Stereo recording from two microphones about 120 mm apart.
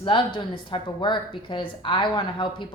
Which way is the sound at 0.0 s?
45° left (ahead or behind).